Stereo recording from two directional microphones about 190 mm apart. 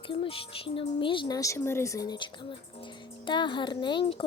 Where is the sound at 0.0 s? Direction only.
30° left (ahead or behind).